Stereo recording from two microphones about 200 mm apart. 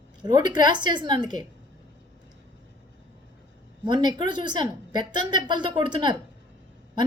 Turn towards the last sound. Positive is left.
turn(degrees=-20)  # may be behind; listen again after turning